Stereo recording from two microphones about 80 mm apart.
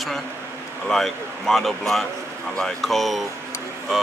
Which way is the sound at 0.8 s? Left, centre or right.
Centre.